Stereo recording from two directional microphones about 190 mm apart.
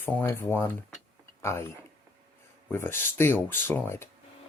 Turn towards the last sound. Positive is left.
turn(degrees=10)  # may be behind; listen again after turning